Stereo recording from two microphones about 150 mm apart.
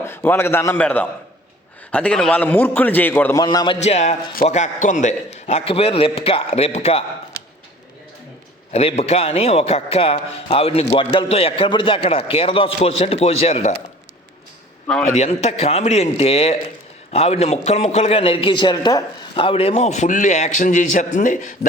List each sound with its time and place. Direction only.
0.0 s a man's voice: 15° left (ahead or behind)
3.3 s a man's voice: 25° left (ahead or behind)
3.8 s a man's voice: 50° left (ahead or behind)
8.7 s a man's voice: 40° left (ahead or behind)
15.1 s a man's voice: 45° left (ahead or behind)